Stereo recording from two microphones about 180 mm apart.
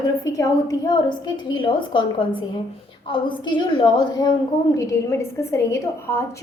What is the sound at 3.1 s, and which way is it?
Speech, 25° left (ahead or behind).